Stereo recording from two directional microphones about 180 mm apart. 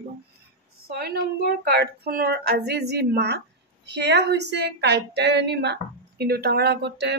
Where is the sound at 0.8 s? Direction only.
60° right (ahead or behind).